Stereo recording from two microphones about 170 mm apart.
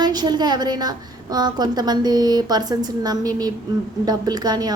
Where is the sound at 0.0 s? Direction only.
25° right (ahead or behind).